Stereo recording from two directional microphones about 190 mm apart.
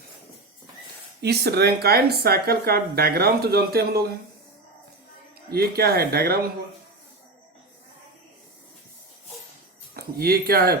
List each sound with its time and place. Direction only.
1.2 s speech: 60° right (ahead or behind)
5.5 s speech: 55° right (ahead or behind)
9.9 s speech: 55° right (ahead or behind)